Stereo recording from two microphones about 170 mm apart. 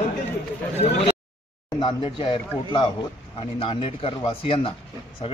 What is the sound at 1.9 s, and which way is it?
Speech, 30° left (ahead or behind).